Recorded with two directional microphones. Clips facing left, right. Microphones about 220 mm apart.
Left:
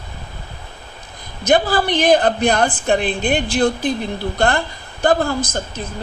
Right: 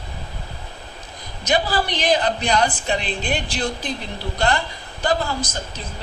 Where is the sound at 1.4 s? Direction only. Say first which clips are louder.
Left 5 dB; 55° left (ahead or behind).